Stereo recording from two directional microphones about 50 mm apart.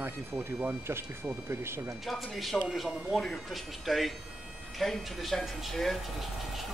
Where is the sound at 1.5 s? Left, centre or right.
Right.